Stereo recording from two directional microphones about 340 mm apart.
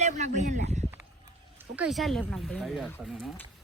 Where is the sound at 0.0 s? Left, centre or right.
Centre.